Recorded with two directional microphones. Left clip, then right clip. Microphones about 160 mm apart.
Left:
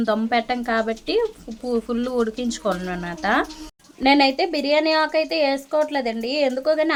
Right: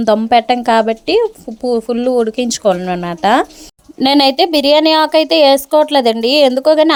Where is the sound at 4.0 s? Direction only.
60° right (ahead or behind).